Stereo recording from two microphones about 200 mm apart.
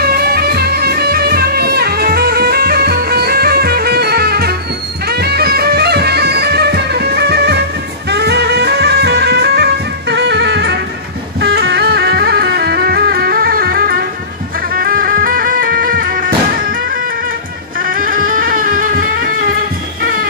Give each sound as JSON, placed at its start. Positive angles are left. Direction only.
{"t": 0.0, "sound": "music", "side_deg": -50}
{"t": 17.7, "sound": "music", "side_deg": -45}